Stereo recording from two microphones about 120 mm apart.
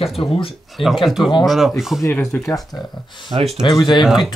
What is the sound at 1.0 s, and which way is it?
Speech, centre (ahead or behind).